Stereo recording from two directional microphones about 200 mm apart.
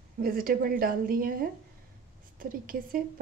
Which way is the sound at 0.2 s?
45° right (ahead or behind).